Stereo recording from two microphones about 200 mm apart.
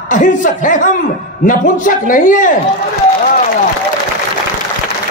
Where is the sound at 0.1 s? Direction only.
40° left (ahead or behind).